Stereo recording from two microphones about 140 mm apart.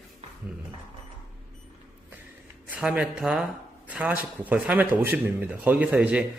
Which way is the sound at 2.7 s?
10° right (ahead or behind).